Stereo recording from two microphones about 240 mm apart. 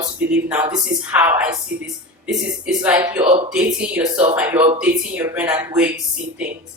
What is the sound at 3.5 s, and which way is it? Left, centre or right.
Speech, centre.